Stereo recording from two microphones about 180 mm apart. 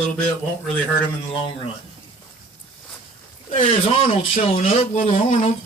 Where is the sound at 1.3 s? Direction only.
30° left (ahead or behind).